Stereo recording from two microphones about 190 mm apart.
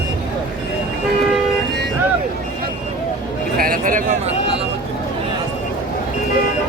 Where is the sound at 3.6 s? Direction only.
50° right (ahead or behind).